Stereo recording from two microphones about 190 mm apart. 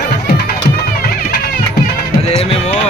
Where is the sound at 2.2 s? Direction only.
30° left (ahead or behind).